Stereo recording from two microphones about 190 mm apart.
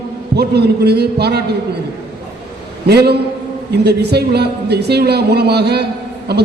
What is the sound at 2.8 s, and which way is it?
Speech, 60° right (ahead or behind).